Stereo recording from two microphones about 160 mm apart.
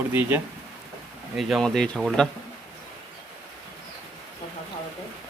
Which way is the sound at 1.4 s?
Centre (ahead or behind).